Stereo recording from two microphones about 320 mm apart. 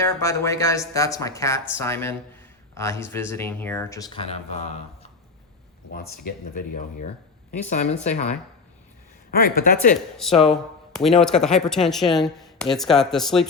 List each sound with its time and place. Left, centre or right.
0.0 s speech: centre
5.9 s a woman's voice: left
7.7 s a woman's voice: left
9.9 s speech: centre